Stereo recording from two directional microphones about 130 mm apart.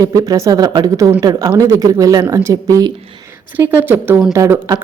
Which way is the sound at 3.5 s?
15° right (ahead or behind).